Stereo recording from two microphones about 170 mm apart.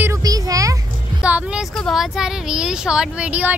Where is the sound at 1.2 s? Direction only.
10° right (ahead or behind).